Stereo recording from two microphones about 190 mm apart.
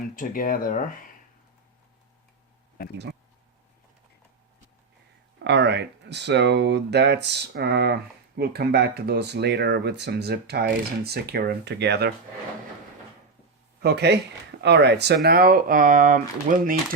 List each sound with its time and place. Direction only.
0.2 s speech: 45° left (ahead or behind)
5.4 s speech: 65° right (ahead or behind)
13.8 s speech: 60° right (ahead or behind); by 16.7 s 45° right (ahead or behind)